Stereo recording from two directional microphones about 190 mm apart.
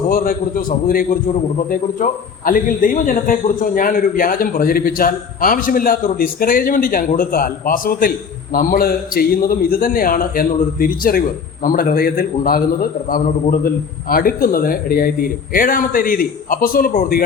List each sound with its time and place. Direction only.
0.1 s a man's voice: 50° left (ahead or behind)